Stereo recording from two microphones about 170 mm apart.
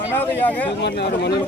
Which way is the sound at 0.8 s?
80° left.